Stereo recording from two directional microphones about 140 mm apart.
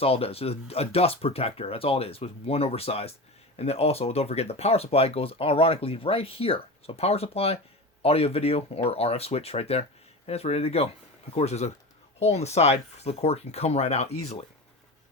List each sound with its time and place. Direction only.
0.0 s speech: 45° left (ahead or behind)